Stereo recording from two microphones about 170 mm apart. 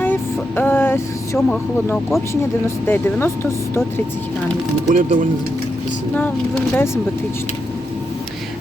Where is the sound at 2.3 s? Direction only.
15° left (ahead or behind).